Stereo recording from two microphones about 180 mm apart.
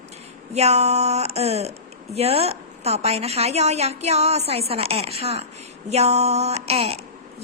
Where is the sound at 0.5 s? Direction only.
35° right (ahead or behind).